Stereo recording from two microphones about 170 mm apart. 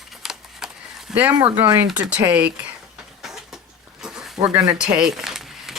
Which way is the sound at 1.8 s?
5° right (ahead or behind).